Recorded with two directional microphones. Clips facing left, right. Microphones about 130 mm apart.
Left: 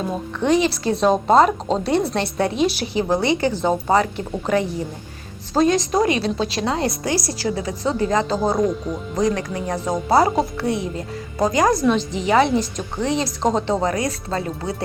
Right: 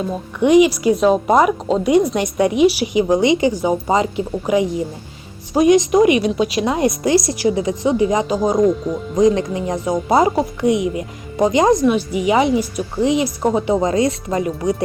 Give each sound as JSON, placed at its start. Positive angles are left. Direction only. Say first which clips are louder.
{"t": 0.3, "sound": "speech", "louder": "right 7 dB", "side_deg": -15}